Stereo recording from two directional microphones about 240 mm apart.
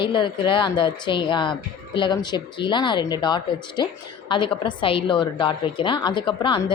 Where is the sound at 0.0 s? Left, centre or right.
Left.